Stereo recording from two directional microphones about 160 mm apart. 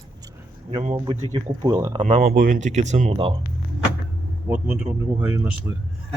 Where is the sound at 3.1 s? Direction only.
35° right (ahead or behind).